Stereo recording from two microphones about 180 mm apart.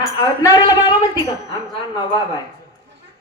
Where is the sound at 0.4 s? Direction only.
20° left (ahead or behind).